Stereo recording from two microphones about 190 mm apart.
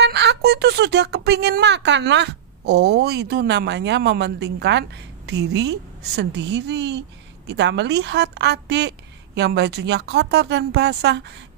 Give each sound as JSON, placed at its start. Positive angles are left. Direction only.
{"t": 0.0, "sound": "speech", "side_deg": -65}